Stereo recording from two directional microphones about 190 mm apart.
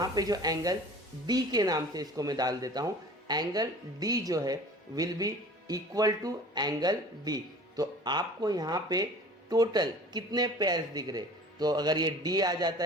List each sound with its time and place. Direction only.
0.0 s speech: 20° right (ahead or behind)